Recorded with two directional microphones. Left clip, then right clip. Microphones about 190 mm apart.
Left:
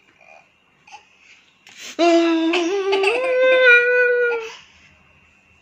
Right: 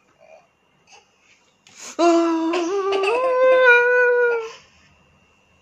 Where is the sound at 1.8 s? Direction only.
15° right (ahead or behind).